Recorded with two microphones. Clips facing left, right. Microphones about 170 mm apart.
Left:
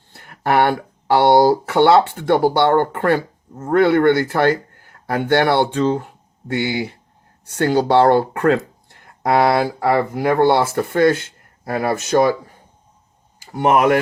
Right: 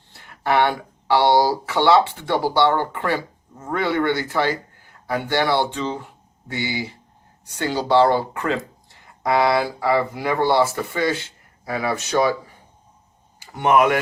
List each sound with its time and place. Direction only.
0.1 s speech: 55° left (ahead or behind)
13.5 s speech: 40° left (ahead or behind)